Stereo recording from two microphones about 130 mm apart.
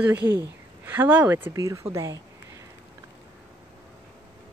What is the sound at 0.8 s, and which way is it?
A woman's voice, 15° right (ahead or behind).